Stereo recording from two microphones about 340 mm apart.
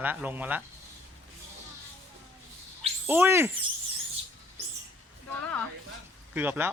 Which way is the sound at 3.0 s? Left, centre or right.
Centre.